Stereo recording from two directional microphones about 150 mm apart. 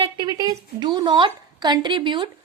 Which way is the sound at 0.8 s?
30° right (ahead or behind).